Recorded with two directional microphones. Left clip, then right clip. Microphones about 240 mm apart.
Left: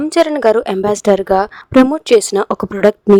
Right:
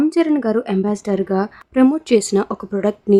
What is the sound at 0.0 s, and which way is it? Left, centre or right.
A woman's voice, left.